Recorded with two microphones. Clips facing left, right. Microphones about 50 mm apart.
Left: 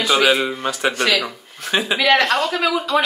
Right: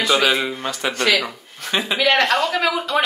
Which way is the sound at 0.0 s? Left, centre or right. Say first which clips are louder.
Left 2 dB; centre.